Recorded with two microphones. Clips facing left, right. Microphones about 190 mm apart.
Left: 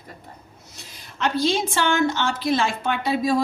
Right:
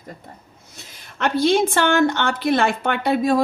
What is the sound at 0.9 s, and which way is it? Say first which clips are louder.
A woman's voice: right 3 dB; 55° right (ahead or behind).